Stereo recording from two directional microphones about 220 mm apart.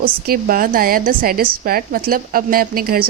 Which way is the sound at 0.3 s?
40° right (ahead or behind).